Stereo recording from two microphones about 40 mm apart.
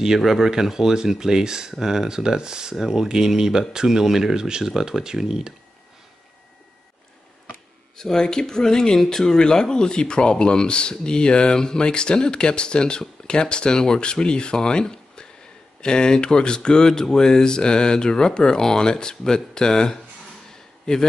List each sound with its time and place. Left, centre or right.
0.2 s speech: centre
8.0 s speech: centre